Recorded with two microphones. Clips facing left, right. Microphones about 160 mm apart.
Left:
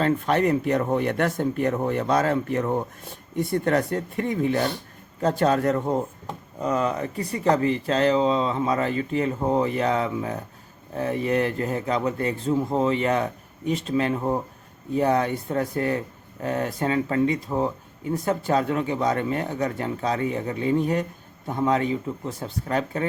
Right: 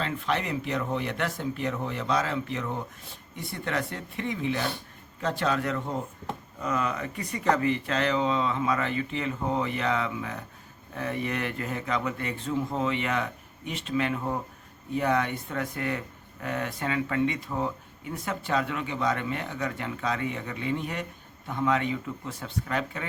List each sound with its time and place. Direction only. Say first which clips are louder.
0.0 s speech: left 8 dB; 45° left (ahead or behind)